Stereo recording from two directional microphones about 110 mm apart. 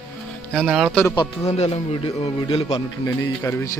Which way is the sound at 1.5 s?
75° left (ahead or behind).